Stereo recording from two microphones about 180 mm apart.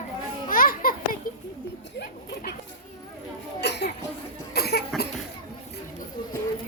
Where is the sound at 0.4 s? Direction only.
50° left (ahead or behind).